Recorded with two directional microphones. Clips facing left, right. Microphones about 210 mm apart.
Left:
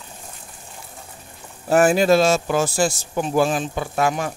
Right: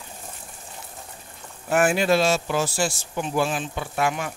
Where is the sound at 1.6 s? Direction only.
40° left (ahead or behind).